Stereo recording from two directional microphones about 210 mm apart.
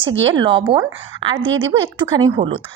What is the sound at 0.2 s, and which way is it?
A woman's voice, 25° right (ahead or behind).